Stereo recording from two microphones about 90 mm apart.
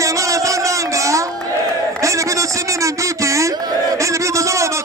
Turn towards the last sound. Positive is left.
turn(degrees=-35)  # may be behind; listen again after turning